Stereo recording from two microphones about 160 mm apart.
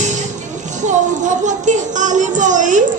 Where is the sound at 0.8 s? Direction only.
50° right (ahead or behind).